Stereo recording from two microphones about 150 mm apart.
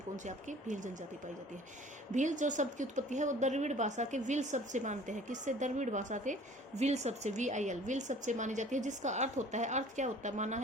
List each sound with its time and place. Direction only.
0.3 s a woman's voice: 55° right (ahead or behind)
2.1 s a woman's voice: 55° right (ahead or behind)